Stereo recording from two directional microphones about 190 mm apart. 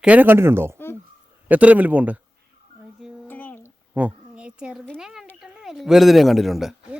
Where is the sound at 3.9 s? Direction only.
5° right (ahead or behind).